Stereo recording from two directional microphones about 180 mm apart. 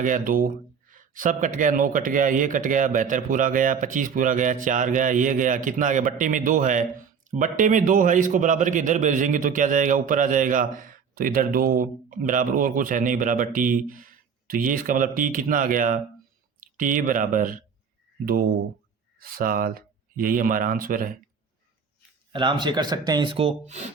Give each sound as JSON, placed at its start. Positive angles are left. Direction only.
{"t": 0.0, "sound": "a man's voice", "side_deg": -50}
{"t": 19.2, "sound": "a man's voice", "side_deg": -55}
{"t": 22.3, "sound": "speech", "side_deg": -25}